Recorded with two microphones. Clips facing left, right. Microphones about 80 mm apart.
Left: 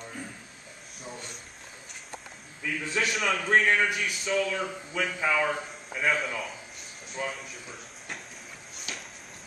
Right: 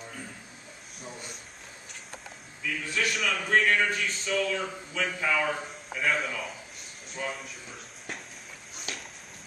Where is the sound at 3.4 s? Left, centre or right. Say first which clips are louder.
Even; centre.